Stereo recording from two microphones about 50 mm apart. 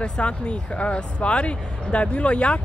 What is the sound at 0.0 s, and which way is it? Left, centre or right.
Speech, left.